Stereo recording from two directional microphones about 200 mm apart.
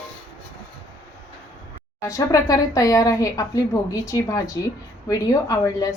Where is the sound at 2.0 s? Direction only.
15° left (ahead or behind).